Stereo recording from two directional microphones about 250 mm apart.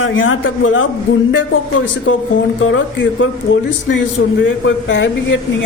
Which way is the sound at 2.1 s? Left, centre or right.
Left.